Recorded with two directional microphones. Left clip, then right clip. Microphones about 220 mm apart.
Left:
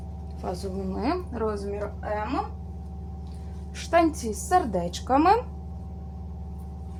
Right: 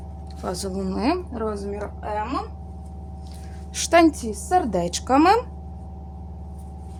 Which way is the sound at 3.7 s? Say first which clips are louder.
Right 5 dB; 50° right (ahead or behind).